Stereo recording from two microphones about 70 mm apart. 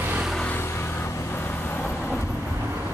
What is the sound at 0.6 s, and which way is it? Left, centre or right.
Vehicle, left.